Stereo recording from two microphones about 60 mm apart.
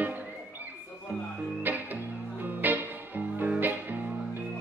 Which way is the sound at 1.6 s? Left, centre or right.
Right.